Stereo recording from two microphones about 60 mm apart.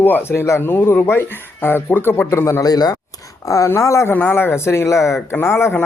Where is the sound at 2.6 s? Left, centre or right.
Left.